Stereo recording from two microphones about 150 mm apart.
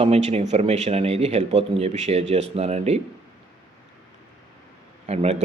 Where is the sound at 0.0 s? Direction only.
45° right (ahead or behind).